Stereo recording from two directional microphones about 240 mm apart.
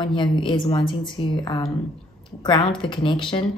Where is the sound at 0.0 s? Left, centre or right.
Centre.